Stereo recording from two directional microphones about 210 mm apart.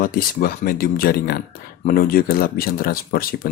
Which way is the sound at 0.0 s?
45° left (ahead or behind).